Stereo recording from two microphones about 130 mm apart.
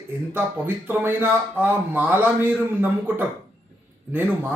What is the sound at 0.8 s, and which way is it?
A man's voice, 15° right (ahead or behind).